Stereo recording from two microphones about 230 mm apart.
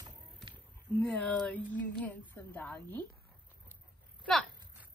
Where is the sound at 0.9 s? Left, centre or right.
Centre.